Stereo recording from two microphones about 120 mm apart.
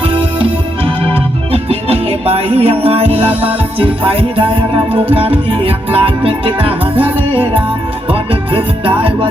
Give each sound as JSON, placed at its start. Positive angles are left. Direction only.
{"t": 0.0, "sound": "music", "side_deg": -50}